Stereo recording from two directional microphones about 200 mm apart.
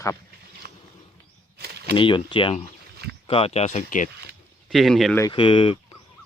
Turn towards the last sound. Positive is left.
turn(degrees=30)  # may be behind; listen again after turning